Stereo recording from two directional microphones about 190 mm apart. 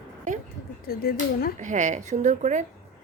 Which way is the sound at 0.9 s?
50° left (ahead or behind).